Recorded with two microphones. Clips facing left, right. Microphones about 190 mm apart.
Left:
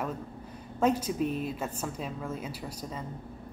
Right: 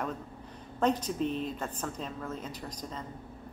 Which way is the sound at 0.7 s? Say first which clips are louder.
Left 2 dB; 10° left (ahead or behind).